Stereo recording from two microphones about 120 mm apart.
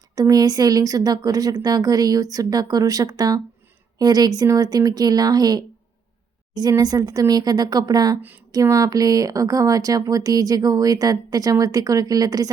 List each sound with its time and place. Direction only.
0.2 s speech: 30° right (ahead or behind)